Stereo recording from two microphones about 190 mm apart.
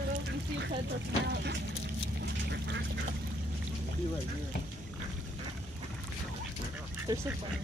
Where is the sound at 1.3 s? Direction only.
60° right (ahead or behind).